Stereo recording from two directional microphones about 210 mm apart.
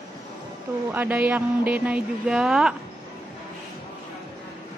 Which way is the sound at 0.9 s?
10° right (ahead or behind).